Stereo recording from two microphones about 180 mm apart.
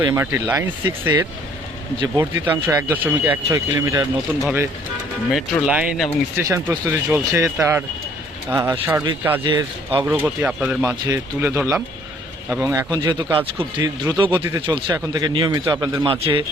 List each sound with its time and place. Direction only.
0.0 s speech: 15° right (ahead or behind)
9.4 s speech: 25° right (ahead or behind)
10.2 s speech: 10° right (ahead or behind); by 16.4 s 30° right (ahead or behind)